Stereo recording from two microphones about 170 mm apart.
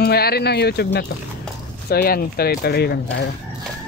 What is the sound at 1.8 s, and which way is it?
Speech, 60° left (ahead or behind).